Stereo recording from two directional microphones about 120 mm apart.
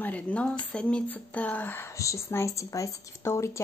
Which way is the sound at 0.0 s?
10° left (ahead or behind).